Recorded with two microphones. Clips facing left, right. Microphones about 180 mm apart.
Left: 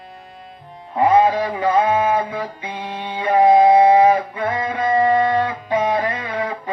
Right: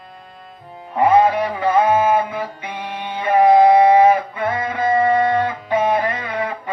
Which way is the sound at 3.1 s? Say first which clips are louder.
Even; 20° left (ahead or behind).